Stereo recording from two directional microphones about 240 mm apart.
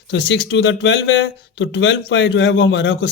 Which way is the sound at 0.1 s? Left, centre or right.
Left.